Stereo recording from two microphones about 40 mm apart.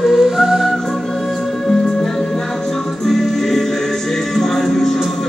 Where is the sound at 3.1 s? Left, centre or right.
Centre.